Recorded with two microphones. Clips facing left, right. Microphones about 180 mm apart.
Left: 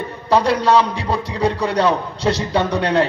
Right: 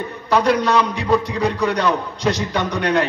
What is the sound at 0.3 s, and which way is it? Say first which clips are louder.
A man's voice: left 2 dB; 30° left (ahead or behind).